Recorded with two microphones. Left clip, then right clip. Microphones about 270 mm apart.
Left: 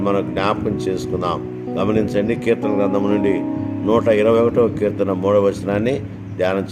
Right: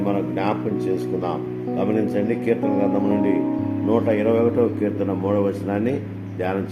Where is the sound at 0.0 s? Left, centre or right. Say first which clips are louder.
Left 4 dB; left.